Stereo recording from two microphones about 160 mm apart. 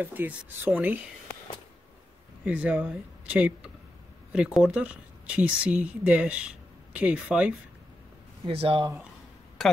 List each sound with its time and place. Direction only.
0.0 s speech: 10° right (ahead or behind)
2.4 s speech: 10° right (ahead or behind)
8.5 s speech: 35° right (ahead or behind)
9.6 s a sound: centre (ahead or behind)